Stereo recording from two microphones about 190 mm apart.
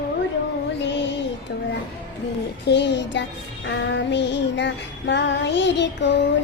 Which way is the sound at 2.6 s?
65° left (ahead or behind).